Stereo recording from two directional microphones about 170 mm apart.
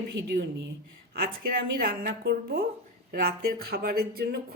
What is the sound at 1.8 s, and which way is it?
A woman's voice, 65° right (ahead or behind).